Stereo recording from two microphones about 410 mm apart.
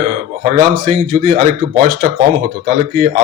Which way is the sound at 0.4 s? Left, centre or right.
Centre.